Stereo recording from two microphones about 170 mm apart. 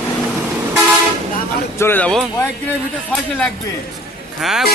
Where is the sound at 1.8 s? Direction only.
10° left (ahead or behind).